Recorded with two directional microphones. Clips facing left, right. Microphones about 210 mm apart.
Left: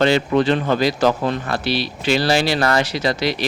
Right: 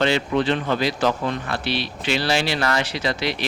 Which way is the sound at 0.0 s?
40° left (ahead or behind).